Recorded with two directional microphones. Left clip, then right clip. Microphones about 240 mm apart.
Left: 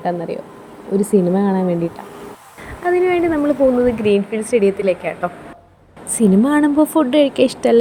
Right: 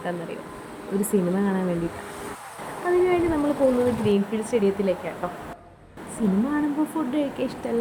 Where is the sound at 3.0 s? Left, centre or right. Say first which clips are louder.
Left 6 dB; centre.